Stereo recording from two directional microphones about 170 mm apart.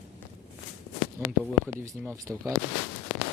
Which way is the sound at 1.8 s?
15° right (ahead or behind).